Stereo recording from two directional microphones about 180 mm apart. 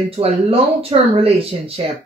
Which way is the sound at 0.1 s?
30° right (ahead or behind).